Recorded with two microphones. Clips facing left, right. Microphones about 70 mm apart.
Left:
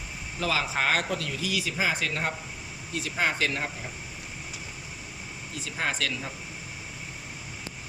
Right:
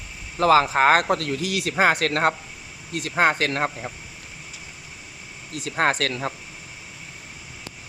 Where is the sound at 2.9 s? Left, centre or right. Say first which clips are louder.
Right 7 dB; right.